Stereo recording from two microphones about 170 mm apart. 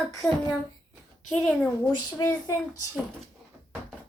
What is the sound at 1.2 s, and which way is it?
Speech, centre (ahead or behind).